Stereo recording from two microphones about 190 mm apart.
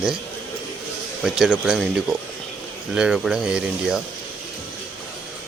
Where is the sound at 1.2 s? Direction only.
Centre (ahead or behind).